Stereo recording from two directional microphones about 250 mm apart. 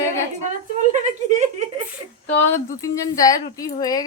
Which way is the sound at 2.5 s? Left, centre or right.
Centre.